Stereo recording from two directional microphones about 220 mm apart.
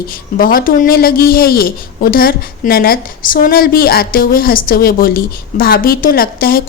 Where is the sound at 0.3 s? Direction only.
40° left (ahead or behind).